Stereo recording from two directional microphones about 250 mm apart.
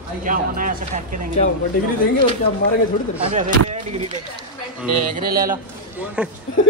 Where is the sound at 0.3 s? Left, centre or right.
Right.